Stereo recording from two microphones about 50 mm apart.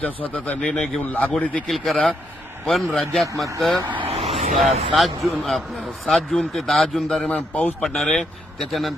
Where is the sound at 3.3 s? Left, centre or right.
Right.